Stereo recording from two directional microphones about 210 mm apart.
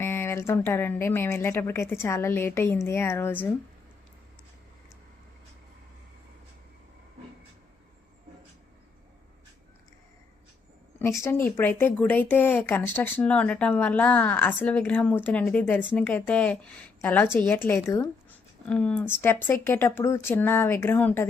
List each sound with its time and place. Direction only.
0.0 s a woman's voice: 10° left (ahead or behind)
11.0 s a woman's voice: 15° left (ahead or behind)